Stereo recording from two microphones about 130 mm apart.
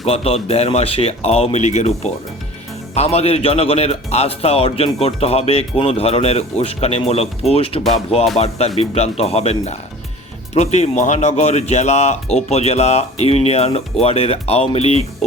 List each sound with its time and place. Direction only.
0.1 s speech: 50° left (ahead or behind)